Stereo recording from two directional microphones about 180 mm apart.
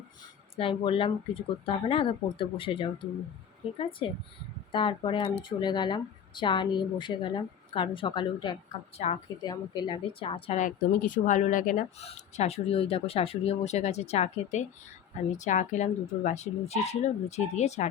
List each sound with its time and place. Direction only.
0.5 s speech: 30° left (ahead or behind)
9.0 s speech: 40° left (ahead or behind)
9.4 s speech: 25° left (ahead or behind)
10.6 s speech: 45° left (ahead or behind)